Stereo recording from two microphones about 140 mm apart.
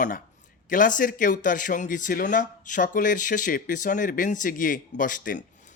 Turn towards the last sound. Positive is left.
turn(degrees=70)  # may be behind; listen again after turning